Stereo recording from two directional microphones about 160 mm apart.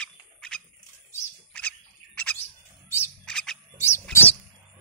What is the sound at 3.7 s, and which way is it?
Wild animals, 15° left (ahead or behind).